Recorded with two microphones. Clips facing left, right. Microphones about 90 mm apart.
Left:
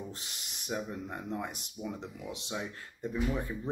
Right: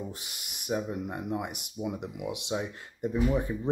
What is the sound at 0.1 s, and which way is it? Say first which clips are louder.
Speech: right 2 dB; 10° right (ahead or behind).